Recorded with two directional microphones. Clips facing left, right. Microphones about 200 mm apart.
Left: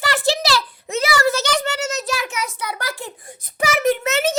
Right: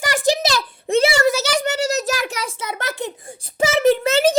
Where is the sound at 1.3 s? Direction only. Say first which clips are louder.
Right 1 dB; 10° right (ahead or behind).